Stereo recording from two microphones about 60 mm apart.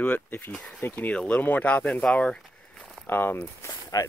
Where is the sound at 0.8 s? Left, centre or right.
Left.